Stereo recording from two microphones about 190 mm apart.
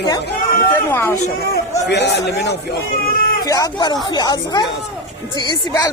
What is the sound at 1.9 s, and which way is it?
Speech, 65° left (ahead or behind).